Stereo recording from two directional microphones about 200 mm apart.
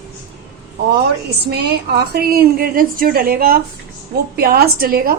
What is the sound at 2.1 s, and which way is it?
A woman's voice, 50° right (ahead or behind).